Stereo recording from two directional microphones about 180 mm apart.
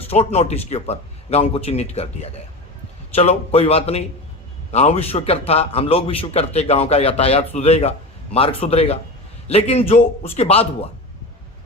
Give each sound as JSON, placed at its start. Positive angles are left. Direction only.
{"t": 0.1, "sound": "a man's voice", "side_deg": 35}